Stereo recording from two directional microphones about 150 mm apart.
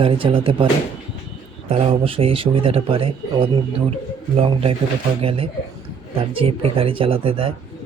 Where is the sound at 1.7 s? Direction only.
45° right (ahead or behind).